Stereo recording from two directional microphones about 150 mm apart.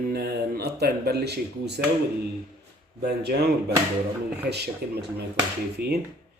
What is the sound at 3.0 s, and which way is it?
Speech, 90° right.